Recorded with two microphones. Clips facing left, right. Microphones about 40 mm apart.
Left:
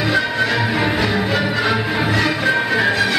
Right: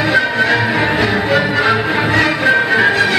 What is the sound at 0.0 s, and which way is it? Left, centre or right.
Music, right.